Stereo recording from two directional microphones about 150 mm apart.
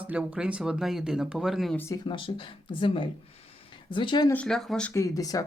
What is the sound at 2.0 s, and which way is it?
Speech, 35° left (ahead or behind).